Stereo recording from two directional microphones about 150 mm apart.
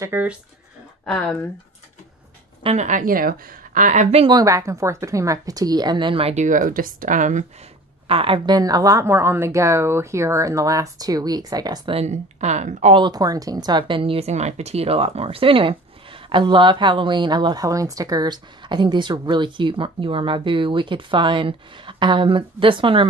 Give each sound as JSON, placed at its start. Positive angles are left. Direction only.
{"t": 0.0, "sound": "speech", "side_deg": -15}
{"t": 1.0, "sound": "speech", "side_deg": 5}
{"t": 2.6, "sound": "a woman's voice", "side_deg": -50}
{"t": 4.2, "sound": "a woman's voice", "side_deg": -25}
{"t": 8.1, "sound": "a woman's voice", "side_deg": -35}
{"t": 11.9, "sound": "speech", "side_deg": -45}
{"t": 12.9, "sound": "speech", "side_deg": -30}